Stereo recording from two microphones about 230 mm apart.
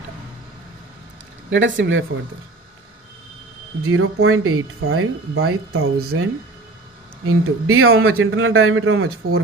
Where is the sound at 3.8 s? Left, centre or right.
Right.